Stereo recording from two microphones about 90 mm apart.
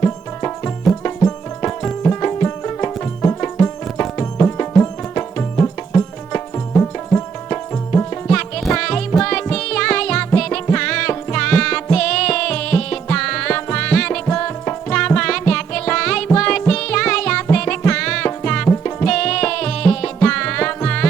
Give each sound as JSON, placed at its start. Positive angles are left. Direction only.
{"t": 0.0, "sound": "music", "side_deg": 25}
{"t": 2.0, "sound": "music", "side_deg": 20}
{"t": 8.4, "sound": "music", "side_deg": 10}
{"t": 19.0, "sound": "music", "side_deg": 10}